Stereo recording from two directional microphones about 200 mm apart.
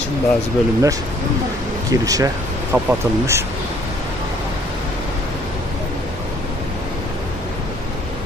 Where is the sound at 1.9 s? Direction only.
15° right (ahead or behind).